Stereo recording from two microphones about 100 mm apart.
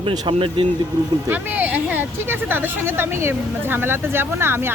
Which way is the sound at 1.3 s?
15° right (ahead or behind).